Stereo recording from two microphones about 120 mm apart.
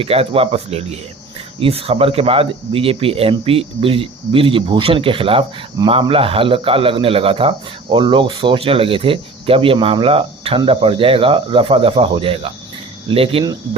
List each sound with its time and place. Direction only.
0.0 s a man's voice: 55° right (ahead or behind)